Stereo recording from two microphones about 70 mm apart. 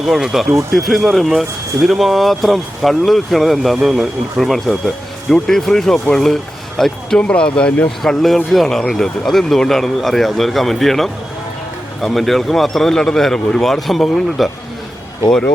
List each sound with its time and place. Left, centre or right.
0.0 s speech: centre
8.0 s speech: centre